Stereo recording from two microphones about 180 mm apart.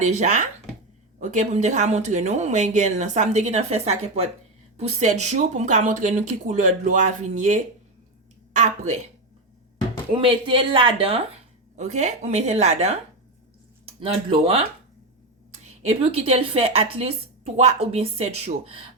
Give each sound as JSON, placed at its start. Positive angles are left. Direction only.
{"t": 0.0, "sound": "speech", "side_deg": -40}
{"t": 10.2, "sound": "speech", "side_deg": -30}
{"t": 15.8, "sound": "speech", "side_deg": -35}